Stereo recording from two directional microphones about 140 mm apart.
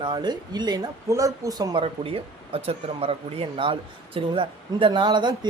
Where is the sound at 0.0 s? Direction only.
30° right (ahead or behind).